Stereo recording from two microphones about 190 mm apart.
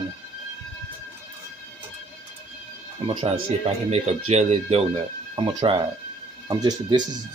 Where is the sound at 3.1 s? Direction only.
35° right (ahead or behind).